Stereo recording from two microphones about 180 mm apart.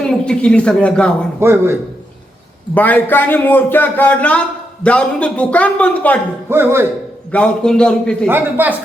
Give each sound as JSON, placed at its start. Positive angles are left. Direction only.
{"t": 0.0, "sound": "speech", "side_deg": 5}
{"t": 1.4, "sound": "speech", "side_deg": -15}
{"t": 2.7, "sound": "a man's voice", "side_deg": 10}
{"t": 6.5, "sound": "speech", "side_deg": -15}
{"t": 7.3, "sound": "a man's voice", "side_deg": 5}
{"t": 8.3, "sound": "speech", "side_deg": -10}